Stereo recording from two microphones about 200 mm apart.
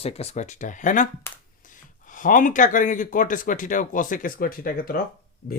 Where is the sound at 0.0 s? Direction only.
30° left (ahead or behind).